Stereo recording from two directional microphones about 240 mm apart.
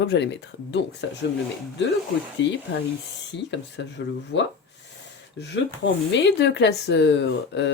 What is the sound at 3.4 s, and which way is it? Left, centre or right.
Speech, left.